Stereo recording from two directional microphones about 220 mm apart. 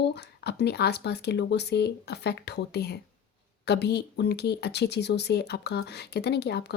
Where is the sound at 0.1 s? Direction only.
50° left (ahead or behind).